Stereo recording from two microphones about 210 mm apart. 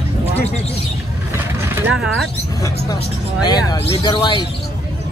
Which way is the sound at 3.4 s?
20° left (ahead or behind).